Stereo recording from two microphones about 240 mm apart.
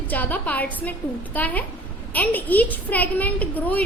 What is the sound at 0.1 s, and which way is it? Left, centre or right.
A woman's voice, centre.